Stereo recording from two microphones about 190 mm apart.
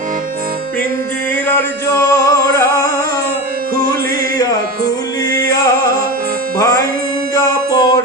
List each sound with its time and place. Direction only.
1.5 s music: 15° left (ahead or behind)
5.3 s music: 20° left (ahead or behind)